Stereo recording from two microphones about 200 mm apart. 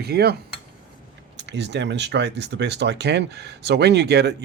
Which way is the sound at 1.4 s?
60° right (ahead or behind).